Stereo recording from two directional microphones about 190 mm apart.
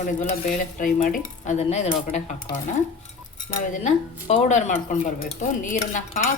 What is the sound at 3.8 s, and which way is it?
A woman's voice, 35° left (ahead or behind).